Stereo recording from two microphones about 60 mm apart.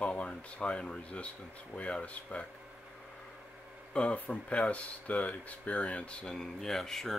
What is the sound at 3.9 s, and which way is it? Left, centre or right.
Speech, left.